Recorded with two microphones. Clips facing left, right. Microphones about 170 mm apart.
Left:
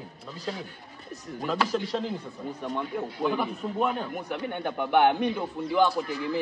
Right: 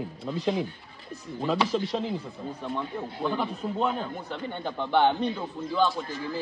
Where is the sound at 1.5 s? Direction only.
Centre (ahead or behind); by 5.9 s 15° left (ahead or behind).